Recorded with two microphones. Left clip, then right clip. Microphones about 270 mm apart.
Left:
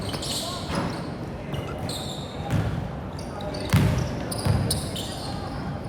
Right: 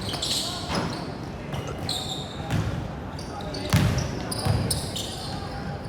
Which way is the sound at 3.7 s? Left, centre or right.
Centre.